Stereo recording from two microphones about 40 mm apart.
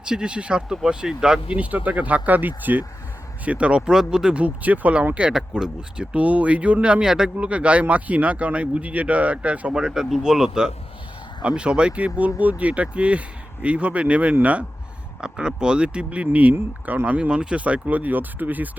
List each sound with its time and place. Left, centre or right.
0.0 s speech: right
1.5 s speech: right
3.4 s speech: right; by 4.4 s centre
4.4 s speech: right
5.3 s speech: centre
6.1 s speech: right
7.0 s speech: centre
7.3 s speech: right
9.7 s speech: centre
11.4 s speech: right
15.2 s speech: right
17.1 s speech: right